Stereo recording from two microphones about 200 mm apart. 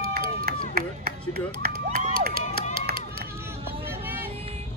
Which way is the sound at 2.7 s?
50° right (ahead or behind).